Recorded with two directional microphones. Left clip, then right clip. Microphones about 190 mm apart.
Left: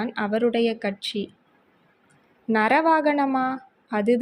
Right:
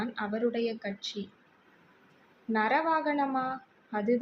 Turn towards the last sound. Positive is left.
turn(degrees=40)  # may be behind; listen again after turning